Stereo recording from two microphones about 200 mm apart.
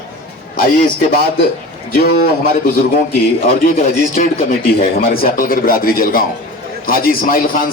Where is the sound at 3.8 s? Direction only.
40° left (ahead or behind).